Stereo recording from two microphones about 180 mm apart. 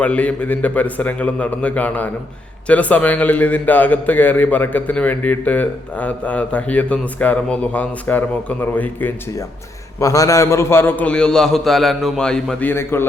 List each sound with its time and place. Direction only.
0.0 s a man's voice: 5° left (ahead or behind)